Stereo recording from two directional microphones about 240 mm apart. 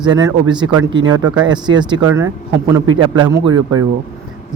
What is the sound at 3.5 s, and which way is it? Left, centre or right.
Speech, right.